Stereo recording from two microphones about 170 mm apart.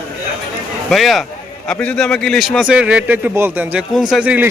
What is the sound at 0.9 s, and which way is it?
A man's voice, centre (ahead or behind).